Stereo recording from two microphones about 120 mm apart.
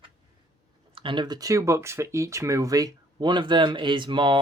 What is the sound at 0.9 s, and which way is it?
Speech, 40° right (ahead or behind).